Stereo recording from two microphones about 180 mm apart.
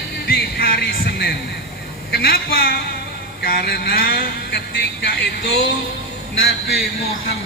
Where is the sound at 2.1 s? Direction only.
60° left (ahead or behind).